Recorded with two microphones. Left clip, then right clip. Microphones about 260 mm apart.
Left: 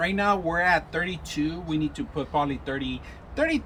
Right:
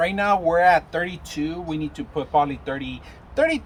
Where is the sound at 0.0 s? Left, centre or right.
Centre.